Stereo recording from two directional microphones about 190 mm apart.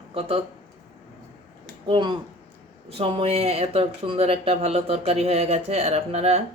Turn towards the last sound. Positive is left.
turn(degrees=-35)  # may be behind; listen again after turning